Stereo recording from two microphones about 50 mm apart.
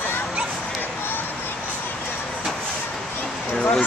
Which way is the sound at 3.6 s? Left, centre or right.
Left.